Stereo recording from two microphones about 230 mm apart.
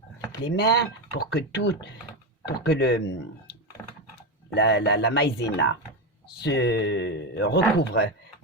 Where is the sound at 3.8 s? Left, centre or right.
Centre.